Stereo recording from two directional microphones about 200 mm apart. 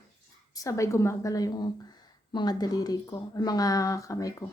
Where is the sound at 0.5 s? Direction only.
15° left (ahead or behind).